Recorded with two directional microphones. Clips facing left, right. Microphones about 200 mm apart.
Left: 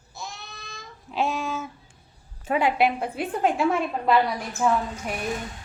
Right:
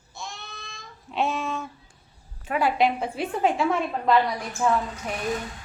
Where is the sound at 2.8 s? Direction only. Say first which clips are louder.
Even; 5° left (ahead or behind).